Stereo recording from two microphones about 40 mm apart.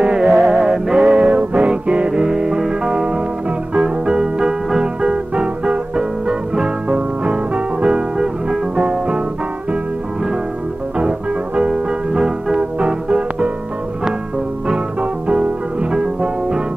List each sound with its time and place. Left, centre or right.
0.0 s music: right
1.1 s music: right
11.0 s music: right
14.7 s music: right